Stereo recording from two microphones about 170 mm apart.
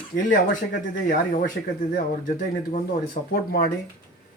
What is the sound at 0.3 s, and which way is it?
Speech, 55° left (ahead or behind).